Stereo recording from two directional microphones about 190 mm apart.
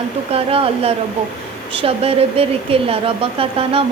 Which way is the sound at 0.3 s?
30° right (ahead or behind).